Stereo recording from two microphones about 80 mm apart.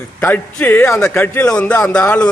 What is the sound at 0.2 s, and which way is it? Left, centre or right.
Speech, left.